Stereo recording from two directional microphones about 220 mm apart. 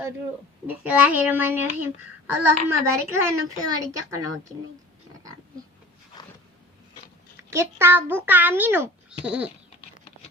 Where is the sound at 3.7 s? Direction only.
15° right (ahead or behind).